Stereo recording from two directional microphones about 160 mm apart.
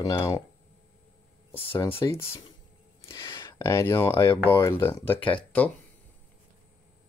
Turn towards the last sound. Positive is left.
turn(degrees=10)  # may be behind; listen again after turning